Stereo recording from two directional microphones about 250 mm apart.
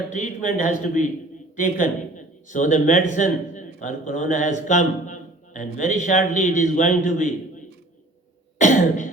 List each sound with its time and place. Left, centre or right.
0.1 s a man's voice: left
8.5 s throat clearing: left